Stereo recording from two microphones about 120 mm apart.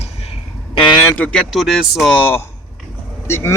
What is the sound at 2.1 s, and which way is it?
Speech, 15° left (ahead or behind).